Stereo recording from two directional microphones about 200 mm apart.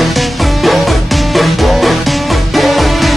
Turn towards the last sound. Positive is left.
turn(degrees=0)  # may be behind; listen again after turning